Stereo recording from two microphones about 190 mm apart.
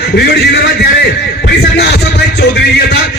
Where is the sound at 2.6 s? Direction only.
60° left (ahead or behind).